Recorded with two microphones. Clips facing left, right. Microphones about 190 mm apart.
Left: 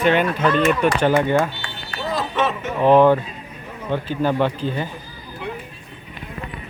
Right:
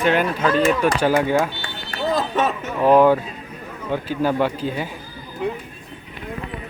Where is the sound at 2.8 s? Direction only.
5° right (ahead or behind).